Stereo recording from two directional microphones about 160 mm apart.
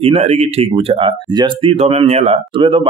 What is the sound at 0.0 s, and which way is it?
Speech, 40° right (ahead or behind).